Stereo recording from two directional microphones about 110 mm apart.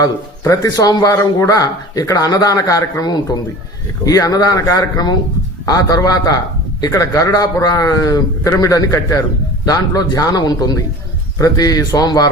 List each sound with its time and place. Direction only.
0.0 s a man's voice: 30° left (ahead or behind)